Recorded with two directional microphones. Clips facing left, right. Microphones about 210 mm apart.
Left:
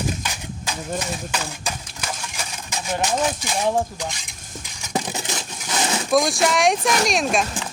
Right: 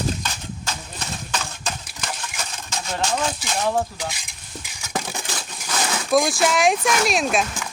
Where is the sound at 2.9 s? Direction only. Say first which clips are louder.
Left 2 dB; 15° left (ahead or behind).